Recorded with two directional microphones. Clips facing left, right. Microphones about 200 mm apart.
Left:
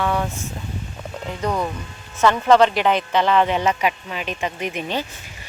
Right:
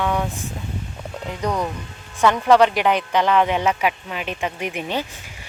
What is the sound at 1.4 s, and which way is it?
Speech, 10° right (ahead or behind).